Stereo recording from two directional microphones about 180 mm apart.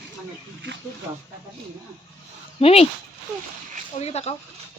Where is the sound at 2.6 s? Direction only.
30° left (ahead or behind).